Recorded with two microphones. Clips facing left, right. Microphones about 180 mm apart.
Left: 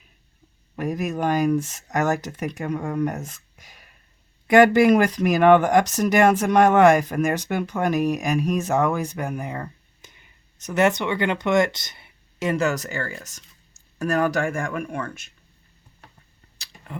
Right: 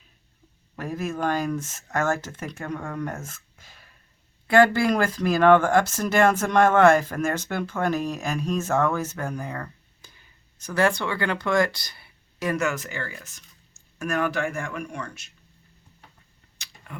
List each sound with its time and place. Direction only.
0.8 s speech: 15° left (ahead or behind); by 15.3 s 50° left (ahead or behind)